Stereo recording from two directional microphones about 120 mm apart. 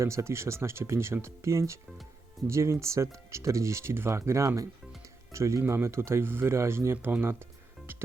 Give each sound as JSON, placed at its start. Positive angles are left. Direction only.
{"t": 0.0, "sound": "speech", "side_deg": -25}
{"t": 7.9, "sound": "music", "side_deg": -20}